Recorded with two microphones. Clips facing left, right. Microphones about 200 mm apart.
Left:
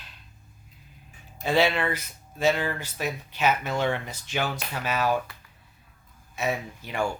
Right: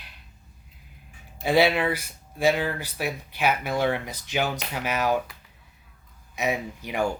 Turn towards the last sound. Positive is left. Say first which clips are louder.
# right 2 dB
turn(degrees=-15)  # may be behind; listen again after turning